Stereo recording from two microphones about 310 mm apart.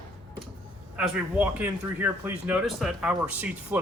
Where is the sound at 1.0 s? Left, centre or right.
Centre.